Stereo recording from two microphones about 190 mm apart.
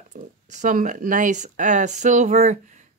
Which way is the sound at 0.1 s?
40° right (ahead or behind).